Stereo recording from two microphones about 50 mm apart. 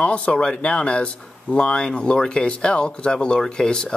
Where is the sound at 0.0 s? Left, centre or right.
Left.